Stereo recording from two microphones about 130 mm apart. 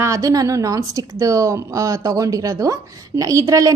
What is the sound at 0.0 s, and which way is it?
A woman's voice, 25° right (ahead or behind).